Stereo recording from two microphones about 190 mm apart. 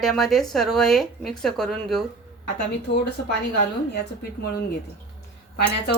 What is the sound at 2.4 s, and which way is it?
Speech, 60° left (ahead or behind).